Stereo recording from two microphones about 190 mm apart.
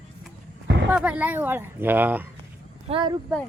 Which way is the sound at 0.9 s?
10° right (ahead or behind).